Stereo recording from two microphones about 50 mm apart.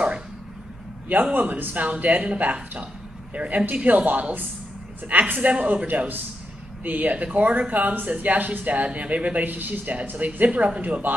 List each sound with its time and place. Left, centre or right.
1.3 s speech: right
5.5 s speech: right